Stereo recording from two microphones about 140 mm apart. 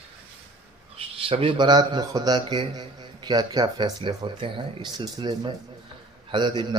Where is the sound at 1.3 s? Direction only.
40° right (ahead or behind).